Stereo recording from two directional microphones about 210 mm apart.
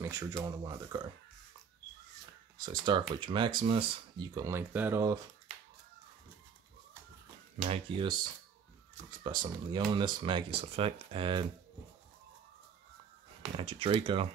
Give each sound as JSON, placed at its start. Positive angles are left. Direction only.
{"t": 0.0, "sound": "speech", "side_deg": -15}
{"t": 2.5, "sound": "speech", "side_deg": -20}
{"t": 7.7, "sound": "speech", "side_deg": -25}
{"t": 13.6, "sound": "speech", "side_deg": -25}